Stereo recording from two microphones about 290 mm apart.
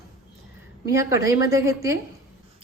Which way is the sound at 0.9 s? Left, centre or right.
Centre.